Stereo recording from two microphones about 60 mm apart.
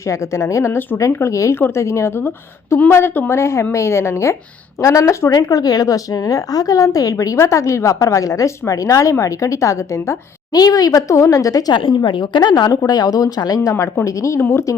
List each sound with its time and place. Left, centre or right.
0.0 s a woman's voice: left
1.5 s a woman's voice: left
7.3 s a woman's voice: left
10.5 s a woman's voice: left
13.7 s a woman's voice: left